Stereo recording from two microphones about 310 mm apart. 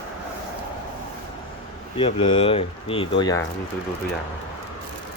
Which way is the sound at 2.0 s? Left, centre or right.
Centre.